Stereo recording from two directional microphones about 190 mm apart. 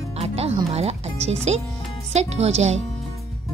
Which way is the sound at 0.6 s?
30° right (ahead or behind).